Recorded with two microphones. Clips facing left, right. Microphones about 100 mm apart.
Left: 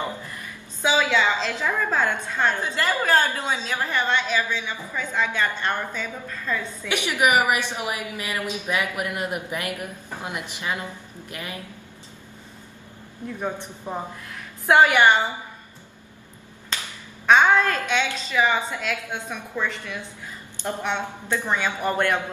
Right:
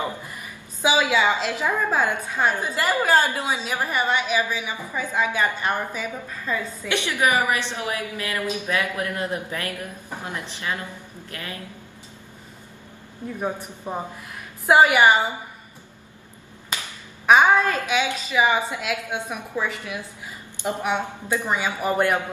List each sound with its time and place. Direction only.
0.0 s a woman's voice: 10° right (ahead or behind)
6.9 s a woman's voice: 15° left (ahead or behind)
13.4 s a woman's voice: 10° right (ahead or behind)
16.7 s a sound: 15° right (ahead or behind)
17.3 s a woman's voice: 10° right (ahead or behind)